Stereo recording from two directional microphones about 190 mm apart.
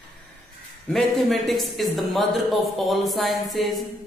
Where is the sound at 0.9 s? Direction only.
Centre (ahead or behind).